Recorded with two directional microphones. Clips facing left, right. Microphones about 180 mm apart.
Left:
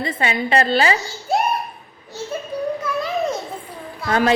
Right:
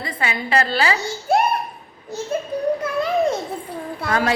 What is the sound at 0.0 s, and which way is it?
Speech, 25° left (ahead or behind).